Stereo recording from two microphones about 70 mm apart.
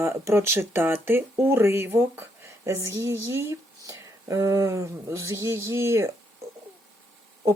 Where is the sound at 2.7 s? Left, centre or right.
Right.